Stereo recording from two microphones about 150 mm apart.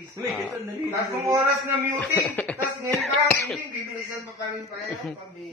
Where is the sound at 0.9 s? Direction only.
20° right (ahead or behind).